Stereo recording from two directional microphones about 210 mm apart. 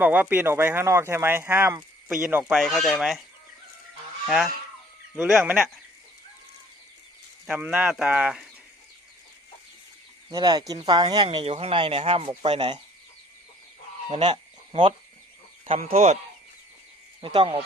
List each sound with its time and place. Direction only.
0.0 s speech: 10° right (ahead or behind)
4.3 s speech: centre (ahead or behind)
7.4 s speech: 5° right (ahead or behind)
10.2 s speech: 20° right (ahead or behind)
14.1 s speech: 30° right (ahead or behind)
17.2 s speech: 25° right (ahead or behind)